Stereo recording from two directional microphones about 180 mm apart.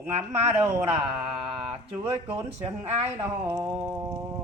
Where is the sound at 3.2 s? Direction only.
15° right (ahead or behind).